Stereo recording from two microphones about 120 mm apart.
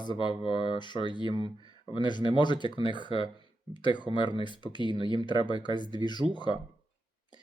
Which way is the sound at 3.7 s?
40° left (ahead or behind).